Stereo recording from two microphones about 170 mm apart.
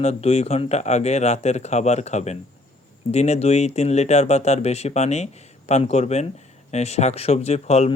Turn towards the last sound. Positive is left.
turn(degrees=40)  # may be behind; listen again after turning